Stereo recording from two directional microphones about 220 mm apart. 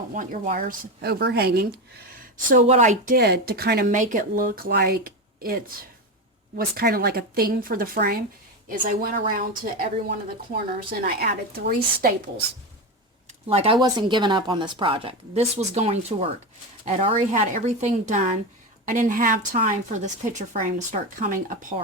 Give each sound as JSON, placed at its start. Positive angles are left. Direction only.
{"t": 0.1, "sound": "speech", "side_deg": -35}
{"t": 11.0, "sound": "speech", "side_deg": -45}
{"t": 13.5, "sound": "a woman's voice", "side_deg": -25}